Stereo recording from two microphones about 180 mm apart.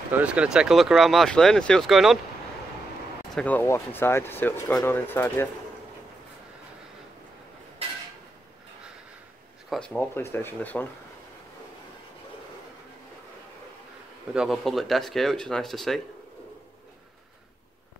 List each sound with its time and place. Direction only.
0.1 s speech: 5° right (ahead or behind)
3.3 s speech: 10° left (ahead or behind)
9.7 s speech: 5° left (ahead or behind)
14.3 s speech: centre (ahead or behind)